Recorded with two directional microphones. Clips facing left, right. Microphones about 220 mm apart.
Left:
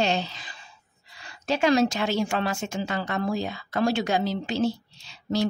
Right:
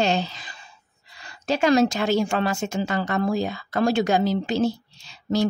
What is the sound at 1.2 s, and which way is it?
A woman's voice, 40° right (ahead or behind).